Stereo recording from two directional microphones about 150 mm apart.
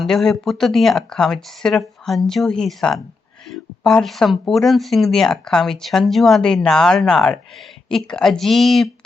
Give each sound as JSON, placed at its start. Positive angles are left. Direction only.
{"t": 0.0, "sound": "speech", "side_deg": 0}